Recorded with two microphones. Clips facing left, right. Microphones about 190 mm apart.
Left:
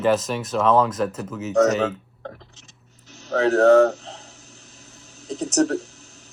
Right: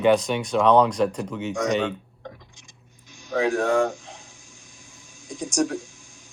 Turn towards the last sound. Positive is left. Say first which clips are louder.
# left 4 dB
turn(degrees=65)  # may be behind; listen again after turning